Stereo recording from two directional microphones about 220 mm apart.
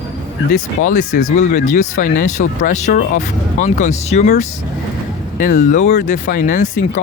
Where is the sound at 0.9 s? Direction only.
35° left (ahead or behind).